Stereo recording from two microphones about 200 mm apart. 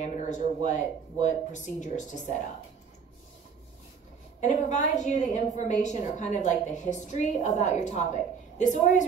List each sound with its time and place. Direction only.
0.0 s a woman's voice: 40° left (ahead or behind)
4.4 s a woman's voice: 35° left (ahead or behind)